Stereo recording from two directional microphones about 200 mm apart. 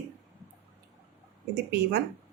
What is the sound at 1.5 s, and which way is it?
Speech, 55° right (ahead or behind).